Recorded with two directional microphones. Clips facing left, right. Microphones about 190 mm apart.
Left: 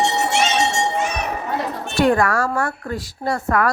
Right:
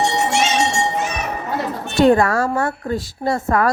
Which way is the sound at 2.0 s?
25° right (ahead or behind).